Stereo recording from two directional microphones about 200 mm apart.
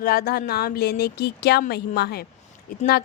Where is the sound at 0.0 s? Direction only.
50° left (ahead or behind).